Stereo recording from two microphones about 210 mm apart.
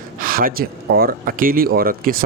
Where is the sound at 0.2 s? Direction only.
40° right (ahead or behind).